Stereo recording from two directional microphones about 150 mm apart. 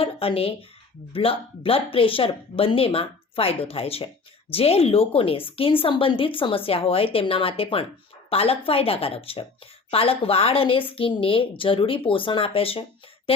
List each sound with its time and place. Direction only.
0.0 s a woman's voice: 40° left (ahead or behind)